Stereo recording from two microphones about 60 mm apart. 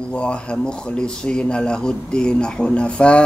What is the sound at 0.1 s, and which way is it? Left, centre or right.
Mantra, centre.